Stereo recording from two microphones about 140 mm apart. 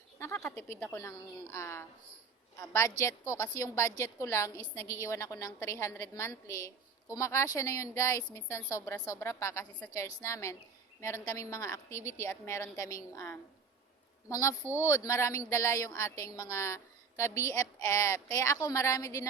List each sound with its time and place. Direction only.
0.2 s a woman's voice: 20° left (ahead or behind)